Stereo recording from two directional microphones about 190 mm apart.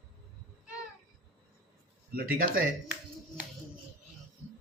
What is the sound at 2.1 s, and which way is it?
Speech, 50° right (ahead or behind).